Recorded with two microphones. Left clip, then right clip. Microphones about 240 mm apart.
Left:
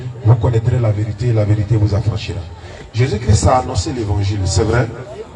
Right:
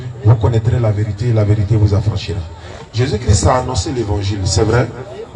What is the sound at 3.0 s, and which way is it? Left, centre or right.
A man's voice, right.